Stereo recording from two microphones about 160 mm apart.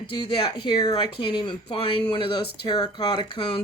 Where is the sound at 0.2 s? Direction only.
30° left (ahead or behind).